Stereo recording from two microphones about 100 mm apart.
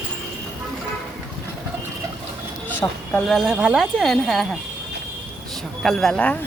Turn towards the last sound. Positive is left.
turn(degrees=10)  # may be behind; listen again after turning